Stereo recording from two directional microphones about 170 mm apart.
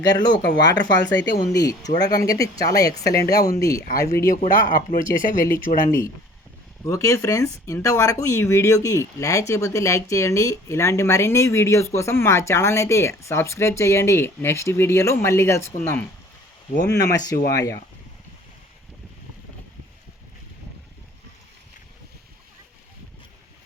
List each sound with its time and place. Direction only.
0.0 s speech: 25° left (ahead or behind)
4.1 s speech: 60° left (ahead or behind)
6.8 s speech: 20° left (ahead or behind)
17.1 s speech: 20° left (ahead or behind)